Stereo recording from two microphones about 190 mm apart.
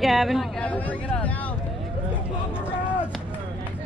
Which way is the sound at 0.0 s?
Centre (ahead or behind).